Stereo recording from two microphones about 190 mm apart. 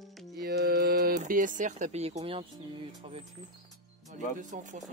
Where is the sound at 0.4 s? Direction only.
55° right (ahead or behind); by 2.4 s 30° right (ahead or behind).